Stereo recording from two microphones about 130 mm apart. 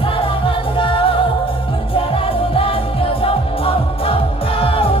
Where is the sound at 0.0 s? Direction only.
40° left (ahead or behind).